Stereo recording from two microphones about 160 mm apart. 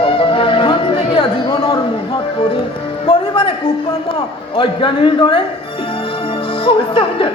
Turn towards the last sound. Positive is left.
turn(degrees=35)  # may be behind; listen again after turning